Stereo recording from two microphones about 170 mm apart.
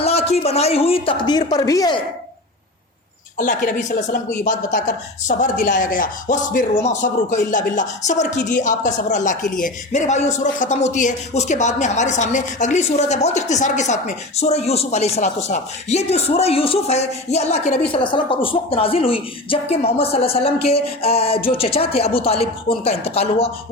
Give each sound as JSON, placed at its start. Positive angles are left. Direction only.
{"t": 0.0, "sound": "a woman's voice", "side_deg": 35}
{"t": 3.3, "sound": "a woman's voice", "side_deg": 50}